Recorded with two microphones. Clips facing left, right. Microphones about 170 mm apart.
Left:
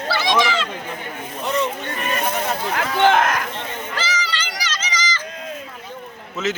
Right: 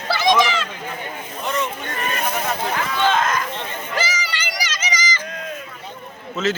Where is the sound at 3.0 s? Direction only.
70° left (ahead or behind).